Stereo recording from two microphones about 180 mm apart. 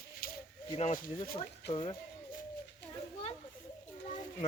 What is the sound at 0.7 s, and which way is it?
Speech, 35° left (ahead or behind).